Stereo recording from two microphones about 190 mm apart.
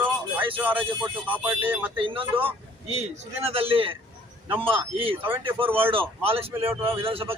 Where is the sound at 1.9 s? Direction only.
25° right (ahead or behind).